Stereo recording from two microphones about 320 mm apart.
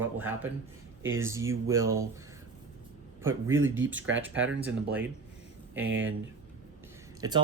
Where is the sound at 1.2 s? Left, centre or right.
Centre.